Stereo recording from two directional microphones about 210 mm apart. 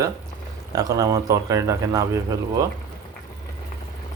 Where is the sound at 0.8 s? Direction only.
15° right (ahead or behind).